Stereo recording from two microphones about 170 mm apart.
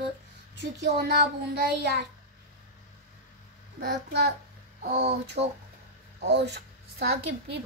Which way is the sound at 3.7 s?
65° right (ahead or behind).